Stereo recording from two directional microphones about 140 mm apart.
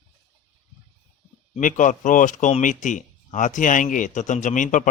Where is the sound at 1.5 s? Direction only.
65° left (ahead or behind).